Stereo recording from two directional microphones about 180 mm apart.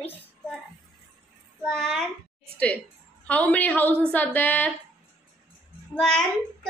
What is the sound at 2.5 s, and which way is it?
A woman's voice, 5° left (ahead or behind).